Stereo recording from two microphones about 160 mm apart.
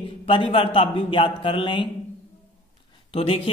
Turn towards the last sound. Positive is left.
turn(degrees=35)  # may be behind; listen again after turning